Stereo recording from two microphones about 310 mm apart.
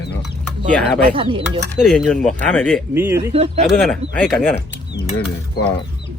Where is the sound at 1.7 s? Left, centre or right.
Centre.